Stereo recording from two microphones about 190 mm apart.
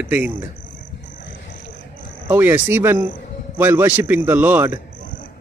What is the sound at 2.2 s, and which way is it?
Speech, 10° right (ahead or behind).